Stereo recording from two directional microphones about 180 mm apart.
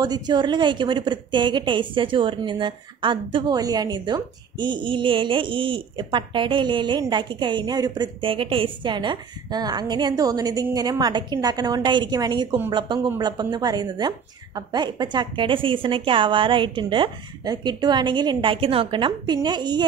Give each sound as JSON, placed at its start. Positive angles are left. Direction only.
{"t": 0.0, "sound": "a woman's voice", "side_deg": -25}